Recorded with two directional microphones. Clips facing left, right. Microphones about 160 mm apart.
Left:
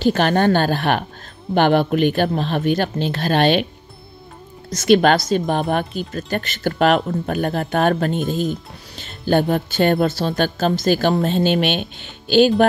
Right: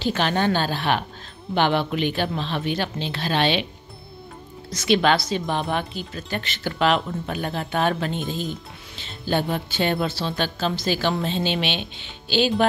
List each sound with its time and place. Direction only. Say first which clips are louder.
0.0 s speech: left 6 dB; 50° left (ahead or behind)
4.6 s speech: left 5 dB; 45° left (ahead or behind)